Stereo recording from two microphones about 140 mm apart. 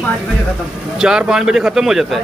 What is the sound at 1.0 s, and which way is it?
Speech, 5° right (ahead or behind).